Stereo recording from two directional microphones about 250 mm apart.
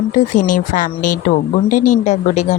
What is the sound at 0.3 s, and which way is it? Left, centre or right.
Speech, left.